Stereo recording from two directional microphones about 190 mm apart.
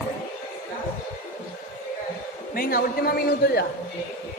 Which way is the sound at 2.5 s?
50° left (ahead or behind).